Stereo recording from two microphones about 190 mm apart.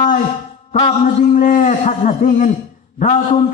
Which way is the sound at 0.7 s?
40° left (ahead or behind).